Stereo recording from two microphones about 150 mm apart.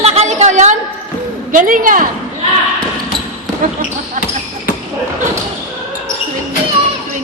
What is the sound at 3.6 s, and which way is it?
Speech, 55° right (ahead or behind).